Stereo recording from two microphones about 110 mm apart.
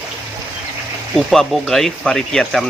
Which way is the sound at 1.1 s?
Centre (ahead or behind).